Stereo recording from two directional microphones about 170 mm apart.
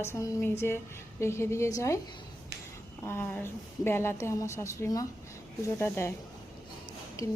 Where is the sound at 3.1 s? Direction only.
15° left (ahead or behind).